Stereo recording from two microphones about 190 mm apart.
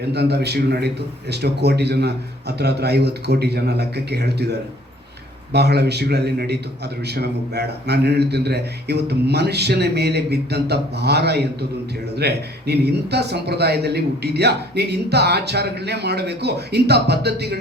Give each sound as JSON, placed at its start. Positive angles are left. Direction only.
{"t": 0.1, "sound": "speech", "side_deg": -60}